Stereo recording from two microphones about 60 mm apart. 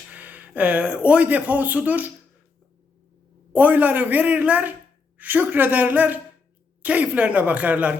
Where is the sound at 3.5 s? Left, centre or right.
Right.